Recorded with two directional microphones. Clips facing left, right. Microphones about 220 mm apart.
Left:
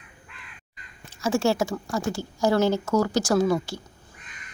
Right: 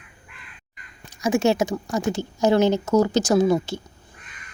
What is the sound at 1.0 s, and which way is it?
A woman's voice, 15° right (ahead or behind).